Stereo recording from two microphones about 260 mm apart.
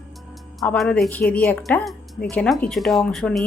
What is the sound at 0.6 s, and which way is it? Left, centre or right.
Speech, centre.